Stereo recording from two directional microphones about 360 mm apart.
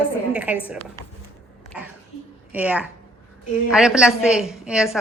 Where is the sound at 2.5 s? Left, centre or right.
Centre.